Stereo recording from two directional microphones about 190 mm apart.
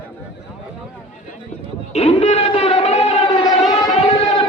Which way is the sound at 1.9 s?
35° left (ahead or behind).